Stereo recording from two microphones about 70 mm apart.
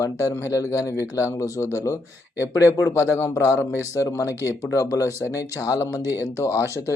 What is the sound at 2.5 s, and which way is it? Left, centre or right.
Speech, left.